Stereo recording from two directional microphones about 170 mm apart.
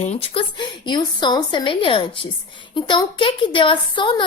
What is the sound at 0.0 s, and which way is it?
Speech, 35° left (ahead or behind).